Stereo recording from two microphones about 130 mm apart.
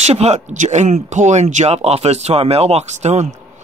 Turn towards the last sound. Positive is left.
turn(degrees=-60)  # may be behind; listen again after turning